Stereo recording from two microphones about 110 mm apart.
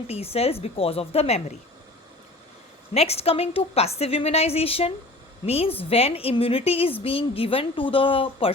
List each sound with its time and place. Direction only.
0.1 s a woman's voice: 65° left (ahead or behind)
2.9 s a woman's voice: 70° left (ahead or behind)